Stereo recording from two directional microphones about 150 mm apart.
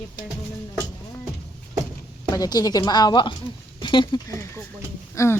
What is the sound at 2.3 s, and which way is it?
A woman's voice, 25° left (ahead or behind).